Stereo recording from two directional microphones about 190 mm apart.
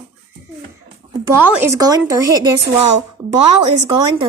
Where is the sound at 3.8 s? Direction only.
20° right (ahead or behind).